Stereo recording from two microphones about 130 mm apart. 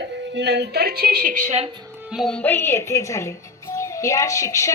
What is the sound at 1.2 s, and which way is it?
Speech, 90° right.